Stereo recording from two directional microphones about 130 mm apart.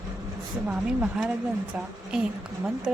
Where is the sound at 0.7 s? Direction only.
10° right (ahead or behind).